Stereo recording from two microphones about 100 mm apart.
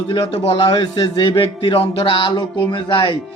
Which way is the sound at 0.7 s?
45° left (ahead or behind).